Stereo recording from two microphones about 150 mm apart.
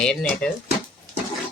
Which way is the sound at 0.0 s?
5° left (ahead or behind).